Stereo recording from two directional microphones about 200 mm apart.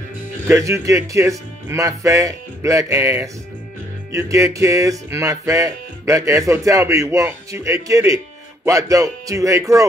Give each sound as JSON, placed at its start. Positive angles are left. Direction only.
{"t": 0.5, "sound": "music", "side_deg": -15}